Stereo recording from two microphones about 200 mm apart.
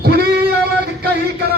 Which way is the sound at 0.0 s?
50° right (ahead or behind).